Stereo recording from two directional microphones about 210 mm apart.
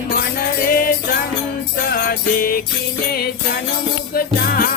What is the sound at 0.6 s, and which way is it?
Music, 45° left (ahead or behind).